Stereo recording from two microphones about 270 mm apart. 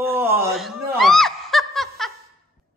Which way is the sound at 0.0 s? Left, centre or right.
Centre.